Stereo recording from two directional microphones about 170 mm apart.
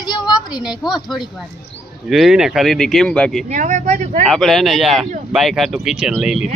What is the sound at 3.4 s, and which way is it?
Speech, 45° right (ahead or behind).